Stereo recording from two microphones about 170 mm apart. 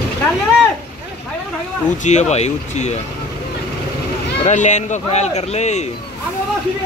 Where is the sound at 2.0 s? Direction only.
40° left (ahead or behind).